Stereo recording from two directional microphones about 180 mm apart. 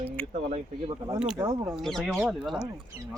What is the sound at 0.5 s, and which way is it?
Speech, 25° right (ahead or behind).